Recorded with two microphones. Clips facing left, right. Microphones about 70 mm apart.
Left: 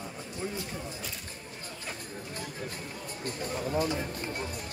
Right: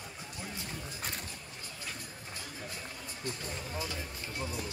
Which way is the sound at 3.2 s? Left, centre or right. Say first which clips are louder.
Left 6 dB; left.